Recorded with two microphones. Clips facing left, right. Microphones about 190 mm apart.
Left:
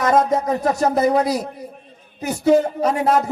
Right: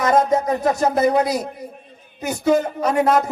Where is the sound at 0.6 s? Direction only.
35° left (ahead or behind).